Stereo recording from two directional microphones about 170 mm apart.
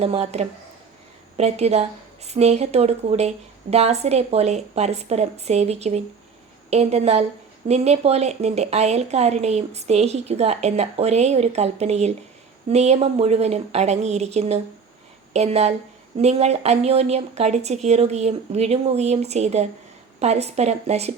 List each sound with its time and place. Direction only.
0.0 s a woman's voice: 40° right (ahead or behind)